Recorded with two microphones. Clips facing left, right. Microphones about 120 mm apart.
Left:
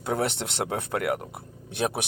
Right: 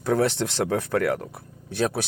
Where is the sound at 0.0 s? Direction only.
20° left (ahead or behind).